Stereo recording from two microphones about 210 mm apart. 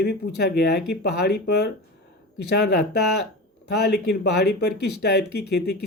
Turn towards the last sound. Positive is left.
turn(degrees=55)  # may be behind; listen again after turning